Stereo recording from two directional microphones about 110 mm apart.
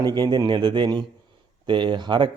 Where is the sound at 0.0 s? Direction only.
40° right (ahead or behind).